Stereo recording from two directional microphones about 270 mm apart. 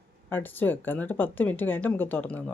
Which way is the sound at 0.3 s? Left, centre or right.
Centre.